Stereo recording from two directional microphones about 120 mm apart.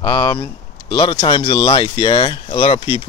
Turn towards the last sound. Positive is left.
turn(degrees=50)  # may be behind; listen again after turning